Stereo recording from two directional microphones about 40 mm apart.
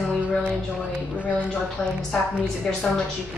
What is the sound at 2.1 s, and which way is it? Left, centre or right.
Speech, centre.